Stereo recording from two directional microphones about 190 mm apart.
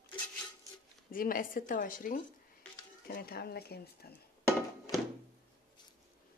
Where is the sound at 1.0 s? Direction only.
50° left (ahead or behind).